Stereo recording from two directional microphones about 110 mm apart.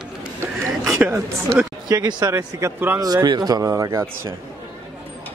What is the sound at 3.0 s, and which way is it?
Speech, 35° right (ahead or behind).